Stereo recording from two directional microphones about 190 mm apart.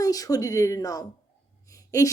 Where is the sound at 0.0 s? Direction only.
20° left (ahead or behind).